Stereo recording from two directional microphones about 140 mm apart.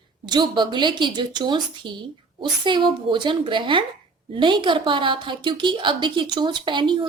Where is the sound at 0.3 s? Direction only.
30° right (ahead or behind).